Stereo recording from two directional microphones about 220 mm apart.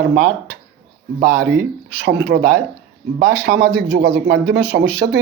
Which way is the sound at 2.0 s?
50° right (ahead or behind).